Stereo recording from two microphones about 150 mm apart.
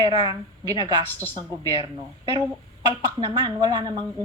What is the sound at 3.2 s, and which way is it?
Speech, 30° right (ahead or behind).